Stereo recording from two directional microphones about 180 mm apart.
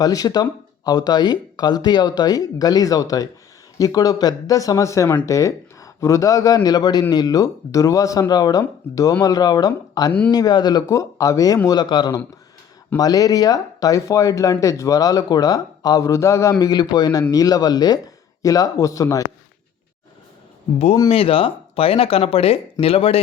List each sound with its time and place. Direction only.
0.0 s speech: 20° left (ahead or behind)
10.1 s speech: 10° left (ahead or behind)
10.3 s speech: 20° left (ahead or behind)
21.1 s speech: 30° left (ahead or behind)